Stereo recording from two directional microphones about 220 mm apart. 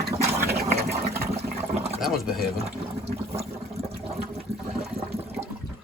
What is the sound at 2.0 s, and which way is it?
Speech, centre (ahead or behind).